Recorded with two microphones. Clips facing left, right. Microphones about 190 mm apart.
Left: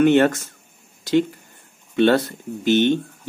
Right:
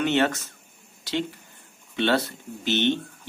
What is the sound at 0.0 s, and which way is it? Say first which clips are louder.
Speech: left 8 dB; 50° left (ahead or behind).